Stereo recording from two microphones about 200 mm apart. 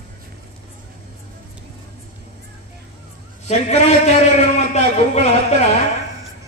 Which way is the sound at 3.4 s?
35° left (ahead or behind).